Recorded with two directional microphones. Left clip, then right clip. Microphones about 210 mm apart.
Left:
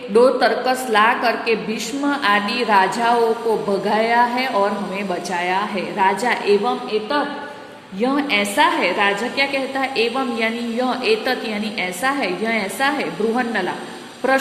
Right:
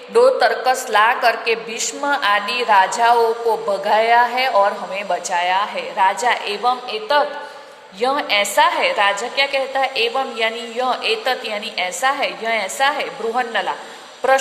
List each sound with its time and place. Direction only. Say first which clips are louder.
0.1 s a woman's voice: right 1 dB; 15° right (ahead or behind)
8.0 s a woman's voice: right 2 dB; 20° right (ahead or behind)